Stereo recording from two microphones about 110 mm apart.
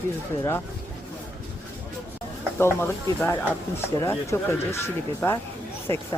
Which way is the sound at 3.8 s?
25° left (ahead or behind).